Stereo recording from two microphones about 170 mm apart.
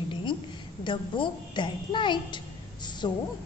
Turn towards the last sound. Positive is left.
turn(degrees=25)  # may be behind; listen again after turning